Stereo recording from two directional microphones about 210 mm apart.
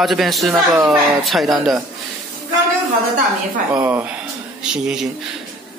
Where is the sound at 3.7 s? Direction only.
10° right (ahead or behind).